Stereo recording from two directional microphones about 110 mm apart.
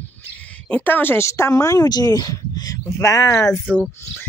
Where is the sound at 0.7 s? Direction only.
15° left (ahead or behind).